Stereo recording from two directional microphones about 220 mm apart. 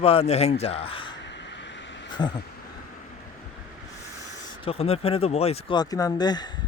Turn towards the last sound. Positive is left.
turn(degrees=20)  # may be behind; listen again after turning